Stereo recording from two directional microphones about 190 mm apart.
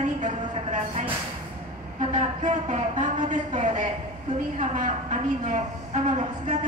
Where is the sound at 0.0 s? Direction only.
40° right (ahead or behind).